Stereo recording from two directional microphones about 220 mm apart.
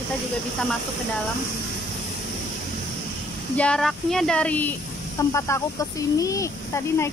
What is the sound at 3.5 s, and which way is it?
Speech, 5° left (ahead or behind).